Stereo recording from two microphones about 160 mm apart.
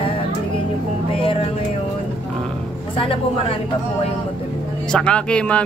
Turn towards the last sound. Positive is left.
turn(degrees=5)  # may be behind; listen again after turning